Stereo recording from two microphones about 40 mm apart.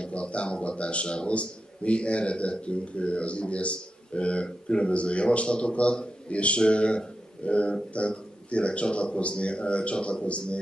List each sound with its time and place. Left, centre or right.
0.0 s a man's voice: left